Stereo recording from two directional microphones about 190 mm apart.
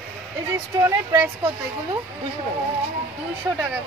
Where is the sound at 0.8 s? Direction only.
10° right (ahead or behind).